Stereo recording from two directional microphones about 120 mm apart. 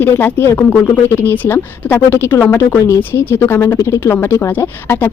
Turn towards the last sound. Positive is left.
turn(degrees=15)  # may be behind; listen again after turning